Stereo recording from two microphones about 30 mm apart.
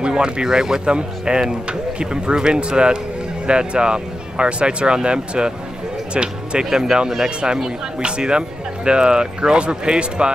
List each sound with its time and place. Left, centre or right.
0.0 s speech: right
0.8 s speech: right
7.2 s speech: right